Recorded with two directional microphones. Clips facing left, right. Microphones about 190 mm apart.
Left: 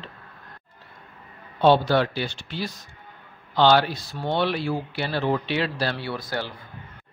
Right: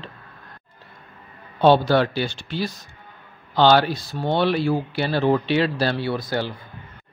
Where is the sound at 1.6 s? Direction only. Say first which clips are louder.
Right 2 dB; 35° right (ahead or behind); by 6.5 s 20° right (ahead or behind).